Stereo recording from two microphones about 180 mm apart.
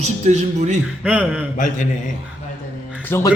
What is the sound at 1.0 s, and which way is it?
Speech, 5° right (ahead or behind).